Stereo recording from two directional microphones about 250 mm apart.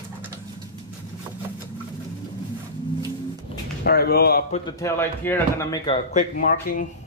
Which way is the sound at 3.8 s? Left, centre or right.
Left.